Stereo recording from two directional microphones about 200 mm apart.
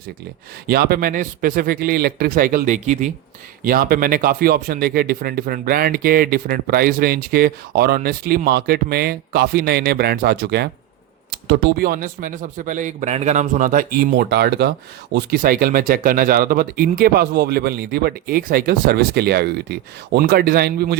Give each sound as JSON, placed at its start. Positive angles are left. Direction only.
{"t": 0.7, "sound": "speech", "side_deg": -50}
{"t": 3.6, "sound": "speech", "side_deg": -45}